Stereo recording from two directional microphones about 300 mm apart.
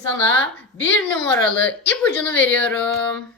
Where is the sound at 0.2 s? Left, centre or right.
Centre.